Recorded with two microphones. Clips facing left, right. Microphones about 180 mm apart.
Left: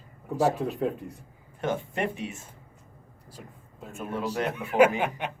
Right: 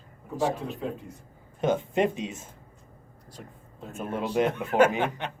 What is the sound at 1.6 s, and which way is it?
Speech, 20° right (ahead or behind).